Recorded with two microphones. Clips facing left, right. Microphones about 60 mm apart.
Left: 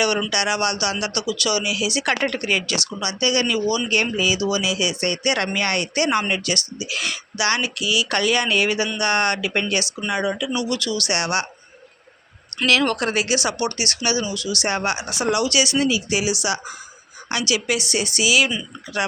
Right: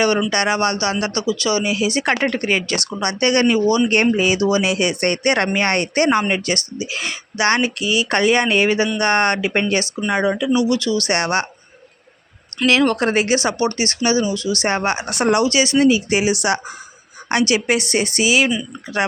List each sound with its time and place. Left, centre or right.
0.3 s speech: right
3.0 s speech: right
3.4 s speech: right
10.5 s speech: right
12.6 s speech: right
13.1 s speech: right
15.0 s speech: right
15.4 s speech: right